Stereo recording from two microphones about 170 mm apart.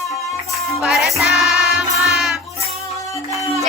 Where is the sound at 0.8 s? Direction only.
Centre (ahead or behind).